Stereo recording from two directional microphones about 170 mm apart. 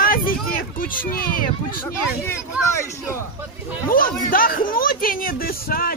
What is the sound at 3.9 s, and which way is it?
Speech, 55° left (ahead or behind).